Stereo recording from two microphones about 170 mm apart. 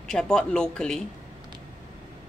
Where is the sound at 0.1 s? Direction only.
5° left (ahead or behind).